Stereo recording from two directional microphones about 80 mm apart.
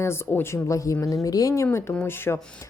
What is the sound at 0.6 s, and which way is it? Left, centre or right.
Speech, left.